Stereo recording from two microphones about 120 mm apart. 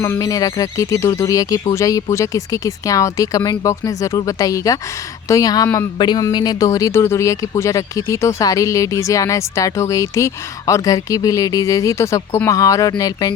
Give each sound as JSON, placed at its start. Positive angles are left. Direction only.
{"t": 0.0, "sound": "speech", "side_deg": 25}